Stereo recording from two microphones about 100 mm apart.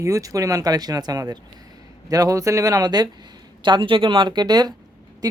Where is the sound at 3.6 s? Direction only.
55° right (ahead or behind).